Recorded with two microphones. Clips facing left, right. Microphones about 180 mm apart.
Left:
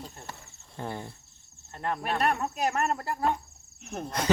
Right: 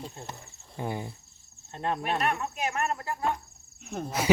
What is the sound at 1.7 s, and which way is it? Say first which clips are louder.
Speech: right 1 dB; 20° right (ahead or behind).